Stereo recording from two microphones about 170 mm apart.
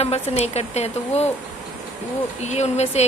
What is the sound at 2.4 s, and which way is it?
Speech, 40° left (ahead or behind).